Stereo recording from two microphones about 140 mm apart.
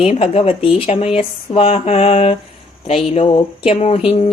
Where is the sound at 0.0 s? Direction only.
45° left (ahead or behind).